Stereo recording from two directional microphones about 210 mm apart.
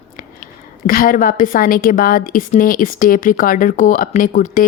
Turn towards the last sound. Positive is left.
turn(degrees=40)  # may be behind; listen again after turning